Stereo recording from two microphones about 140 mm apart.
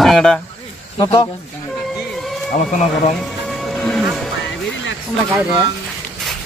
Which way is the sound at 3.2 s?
Centre (ahead or behind).